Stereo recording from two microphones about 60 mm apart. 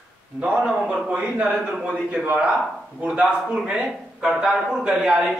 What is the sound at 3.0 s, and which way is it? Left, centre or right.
A man's voice, centre.